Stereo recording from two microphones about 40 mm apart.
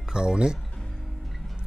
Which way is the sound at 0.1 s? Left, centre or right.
Right.